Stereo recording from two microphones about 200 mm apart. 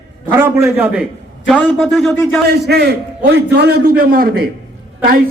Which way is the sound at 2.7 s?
55° right (ahead or behind).